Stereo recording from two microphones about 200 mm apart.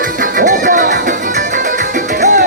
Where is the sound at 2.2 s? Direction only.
40° right (ahead or behind).